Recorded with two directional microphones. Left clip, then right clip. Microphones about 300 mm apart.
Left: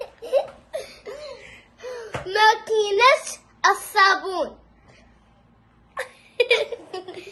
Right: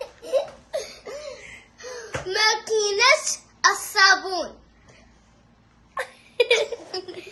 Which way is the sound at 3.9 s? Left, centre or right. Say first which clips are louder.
Even; centre.